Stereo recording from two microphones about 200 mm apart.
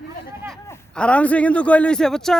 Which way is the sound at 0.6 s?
10° left (ahead or behind).